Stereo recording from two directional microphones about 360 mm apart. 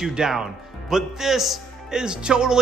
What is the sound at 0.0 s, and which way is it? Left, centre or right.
Speech, centre.